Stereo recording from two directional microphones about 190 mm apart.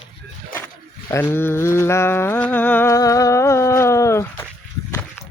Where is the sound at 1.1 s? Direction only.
10° left (ahead or behind).